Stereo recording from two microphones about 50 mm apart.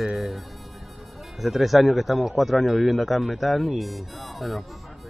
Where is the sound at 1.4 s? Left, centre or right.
Centre.